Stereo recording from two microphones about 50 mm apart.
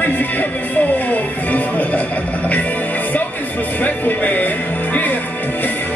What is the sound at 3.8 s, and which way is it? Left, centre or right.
Music, left.